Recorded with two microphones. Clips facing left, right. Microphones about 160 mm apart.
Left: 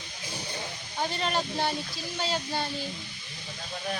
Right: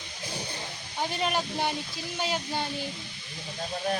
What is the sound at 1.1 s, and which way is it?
Speech, 10° right (ahead or behind).